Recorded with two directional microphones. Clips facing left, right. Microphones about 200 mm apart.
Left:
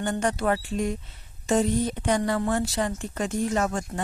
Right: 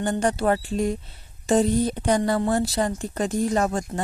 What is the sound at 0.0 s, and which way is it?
A woman's voice, 35° right (ahead or behind).